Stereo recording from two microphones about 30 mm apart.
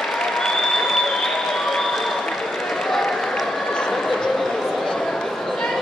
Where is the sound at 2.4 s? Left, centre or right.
Centre.